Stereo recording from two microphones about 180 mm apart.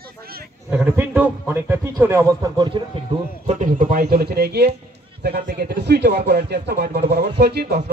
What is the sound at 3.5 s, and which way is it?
Speech, 45° right (ahead or behind).